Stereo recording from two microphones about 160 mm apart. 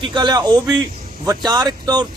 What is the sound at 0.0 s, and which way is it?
A man's voice, 30° right (ahead or behind).